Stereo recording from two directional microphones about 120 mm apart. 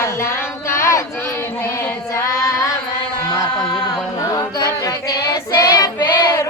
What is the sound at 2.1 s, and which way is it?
Child singing, 25° left (ahead or behind).